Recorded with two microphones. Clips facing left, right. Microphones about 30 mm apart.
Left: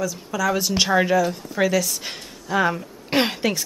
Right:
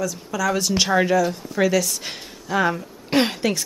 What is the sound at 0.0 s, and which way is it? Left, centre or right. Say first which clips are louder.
Speech: even; centre.